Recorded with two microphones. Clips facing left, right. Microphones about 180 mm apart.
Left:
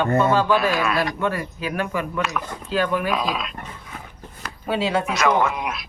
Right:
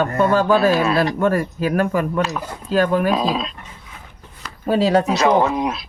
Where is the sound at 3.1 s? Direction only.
30° right (ahead or behind).